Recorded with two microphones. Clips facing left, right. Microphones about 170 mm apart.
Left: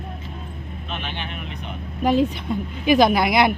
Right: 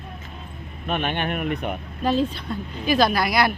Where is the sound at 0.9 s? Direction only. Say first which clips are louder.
Right 8 dB; 55° right (ahead or behind).